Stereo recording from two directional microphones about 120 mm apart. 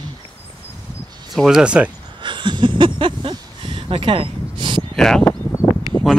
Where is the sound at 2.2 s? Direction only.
40° right (ahead or behind).